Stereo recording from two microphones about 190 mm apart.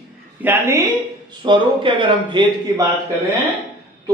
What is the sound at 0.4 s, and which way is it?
Speech, 10° right (ahead or behind).